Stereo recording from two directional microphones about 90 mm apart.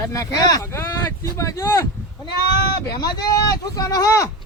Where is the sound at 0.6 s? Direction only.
30° left (ahead or behind).